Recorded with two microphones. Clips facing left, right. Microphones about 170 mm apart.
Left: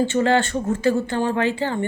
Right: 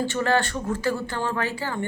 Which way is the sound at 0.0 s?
20° left (ahead or behind).